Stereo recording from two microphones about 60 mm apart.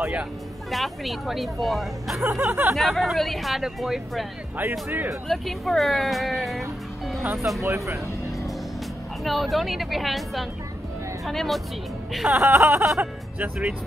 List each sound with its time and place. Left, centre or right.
0.0 s speech: right
0.7 s speech: centre
2.2 s speech: right
2.7 s speech: centre
4.6 s speech: right
5.3 s speech: centre
7.6 s speech: right
9.2 s speech: centre
12.4 s speech: right